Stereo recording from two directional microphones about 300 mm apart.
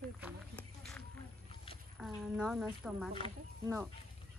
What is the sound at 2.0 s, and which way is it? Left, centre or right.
A woman's voice, centre.